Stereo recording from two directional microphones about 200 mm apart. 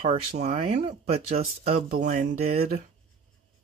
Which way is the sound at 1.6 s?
45° right (ahead or behind).